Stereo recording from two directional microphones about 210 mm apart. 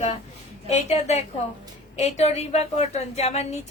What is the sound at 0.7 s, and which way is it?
A woman's voice, 30° left (ahead or behind).